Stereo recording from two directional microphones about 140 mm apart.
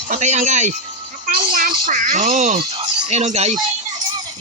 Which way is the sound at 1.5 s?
70° right (ahead or behind).